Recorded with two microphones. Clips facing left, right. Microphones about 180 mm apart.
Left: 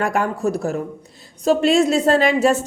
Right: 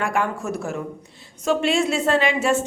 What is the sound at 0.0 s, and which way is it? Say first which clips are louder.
A woman's voice: left 4 dB; 40° left (ahead or behind).